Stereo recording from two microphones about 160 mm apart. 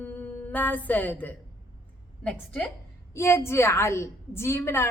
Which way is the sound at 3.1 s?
15° left (ahead or behind).